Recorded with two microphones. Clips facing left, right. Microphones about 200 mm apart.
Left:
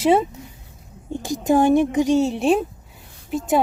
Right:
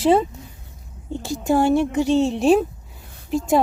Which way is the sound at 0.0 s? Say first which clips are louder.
Even; 10° left (ahead or behind).